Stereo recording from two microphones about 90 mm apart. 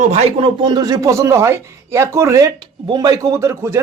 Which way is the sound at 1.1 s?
30° right (ahead or behind).